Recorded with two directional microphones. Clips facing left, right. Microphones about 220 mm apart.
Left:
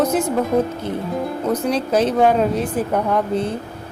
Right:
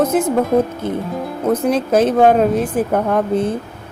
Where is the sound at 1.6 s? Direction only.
50° right (ahead or behind).